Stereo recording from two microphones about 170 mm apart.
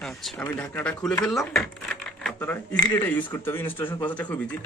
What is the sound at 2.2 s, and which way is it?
Coin, 10° left (ahead or behind).